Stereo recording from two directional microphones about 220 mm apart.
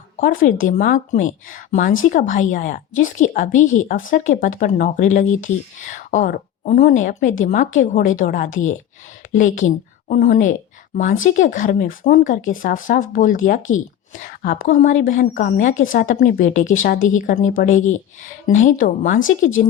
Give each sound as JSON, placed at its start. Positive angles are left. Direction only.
{"t": 0.2, "sound": "a woman's voice", "side_deg": 40}
{"t": 13.6, "sound": "speech", "side_deg": 65}
{"t": 14.1, "sound": "a woman's voice", "side_deg": 35}